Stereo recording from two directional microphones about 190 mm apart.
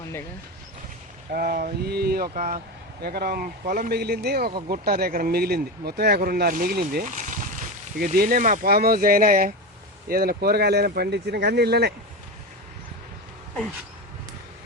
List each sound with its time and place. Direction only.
1.3 s speech: 50° right (ahead or behind)
7.0 s speech: 40° right (ahead or behind); by 11.9 s 60° right (ahead or behind)